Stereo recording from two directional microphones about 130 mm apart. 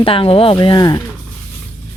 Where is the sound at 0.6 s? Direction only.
30° left (ahead or behind).